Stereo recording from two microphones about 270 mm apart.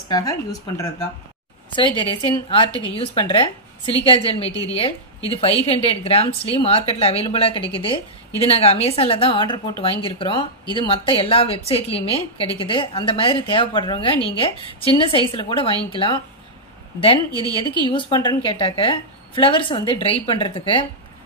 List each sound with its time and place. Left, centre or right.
0.1 s a woman's voice: centre
17.3 s speech: centre
17.8 s a woman's voice: centre